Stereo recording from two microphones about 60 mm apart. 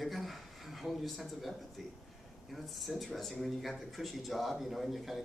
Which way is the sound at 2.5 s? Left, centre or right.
Centre.